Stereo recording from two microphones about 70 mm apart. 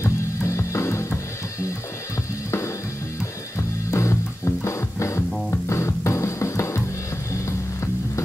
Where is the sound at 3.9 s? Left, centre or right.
Left.